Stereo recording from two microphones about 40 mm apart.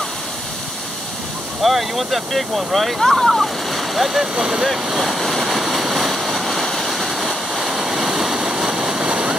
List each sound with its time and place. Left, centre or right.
1.6 s speech: centre
4.8 s waves: centre
8.4 s waterfall: centre
9.1 s waterfall: right